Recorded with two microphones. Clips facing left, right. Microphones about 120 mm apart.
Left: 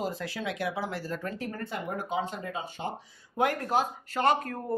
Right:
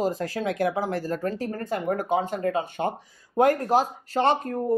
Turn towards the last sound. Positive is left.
turn(degrees=-25)  # may be behind; listen again after turning